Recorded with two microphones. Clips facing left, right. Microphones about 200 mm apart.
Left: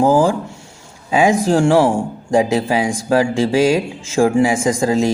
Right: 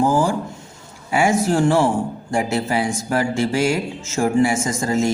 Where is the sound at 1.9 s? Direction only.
15° left (ahead or behind).